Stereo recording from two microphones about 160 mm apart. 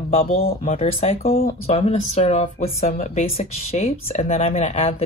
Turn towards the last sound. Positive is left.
turn(degrees=40)  # may be behind; listen again after turning